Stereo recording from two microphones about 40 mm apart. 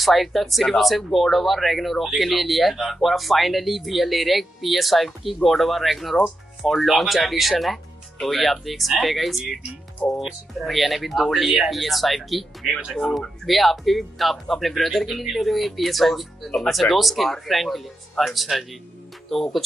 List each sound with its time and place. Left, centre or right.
0.0 s speech: centre